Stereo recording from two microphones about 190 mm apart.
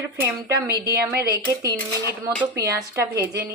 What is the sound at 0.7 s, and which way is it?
Speech, 55° right (ahead or behind).